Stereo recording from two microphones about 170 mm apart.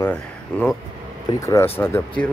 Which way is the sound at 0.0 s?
10° left (ahead or behind).